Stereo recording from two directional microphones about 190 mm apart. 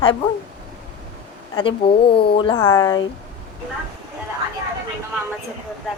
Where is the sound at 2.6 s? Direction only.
15° left (ahead or behind).